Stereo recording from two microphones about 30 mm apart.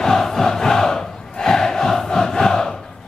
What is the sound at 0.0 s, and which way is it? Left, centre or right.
Crowd, centre.